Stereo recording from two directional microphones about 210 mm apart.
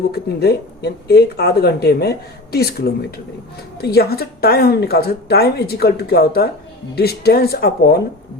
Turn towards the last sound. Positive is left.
turn(degrees=45)  # may be behind; listen again after turning